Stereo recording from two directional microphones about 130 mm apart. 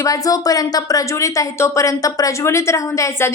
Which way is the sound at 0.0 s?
25° left (ahead or behind).